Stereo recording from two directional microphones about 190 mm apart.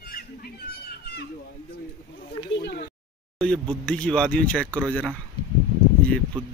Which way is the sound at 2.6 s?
55° left (ahead or behind).